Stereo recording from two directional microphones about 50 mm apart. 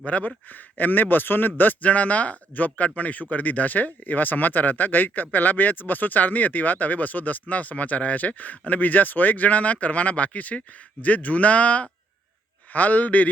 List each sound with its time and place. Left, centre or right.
0.0 s speech: left